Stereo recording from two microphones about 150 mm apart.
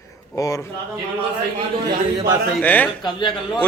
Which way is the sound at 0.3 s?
20° left (ahead or behind).